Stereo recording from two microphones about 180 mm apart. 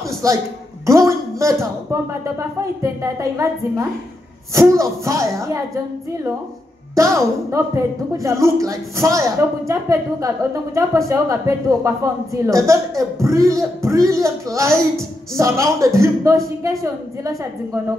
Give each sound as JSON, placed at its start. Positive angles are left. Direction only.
{"t": 0.2, "sound": "a woman's voice", "side_deg": -20}
{"t": 7.0, "sound": "a woman's voice", "side_deg": -15}